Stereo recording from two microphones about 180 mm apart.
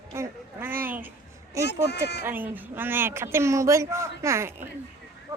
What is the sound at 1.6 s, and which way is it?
Speech, 70° left (ahead or behind).